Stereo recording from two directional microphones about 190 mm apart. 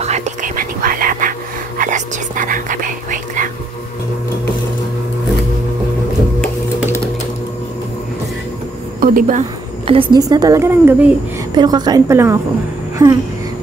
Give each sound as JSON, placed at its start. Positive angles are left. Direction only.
{"t": 0.0, "sound": "whispering", "side_deg": -35}
{"t": 9.0, "sound": "a woman's voice", "side_deg": -45}
{"t": 9.8, "sound": "a woman's voice", "side_deg": -25}
{"t": 11.5, "sound": "a woman's voice", "side_deg": -20}
{"t": 13.0, "sound": "a sound", "side_deg": -15}